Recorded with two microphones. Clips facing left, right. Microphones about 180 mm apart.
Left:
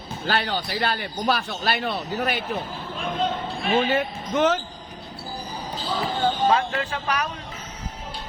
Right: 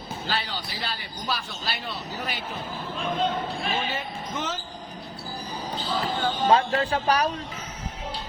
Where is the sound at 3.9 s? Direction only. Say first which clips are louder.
Left 8 dB; 60° left (ahead or behind).